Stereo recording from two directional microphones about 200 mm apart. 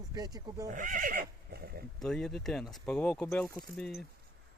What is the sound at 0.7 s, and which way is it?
Neigh, 40° right (ahead or behind).